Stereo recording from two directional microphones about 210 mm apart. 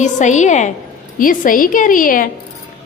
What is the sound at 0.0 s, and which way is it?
A woman's voice, 35° left (ahead or behind).